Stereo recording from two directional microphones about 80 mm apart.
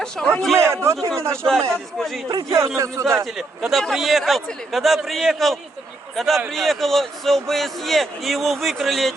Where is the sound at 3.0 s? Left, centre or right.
Right.